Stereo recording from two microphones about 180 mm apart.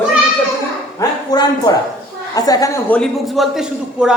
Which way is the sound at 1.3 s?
20° left (ahead or behind).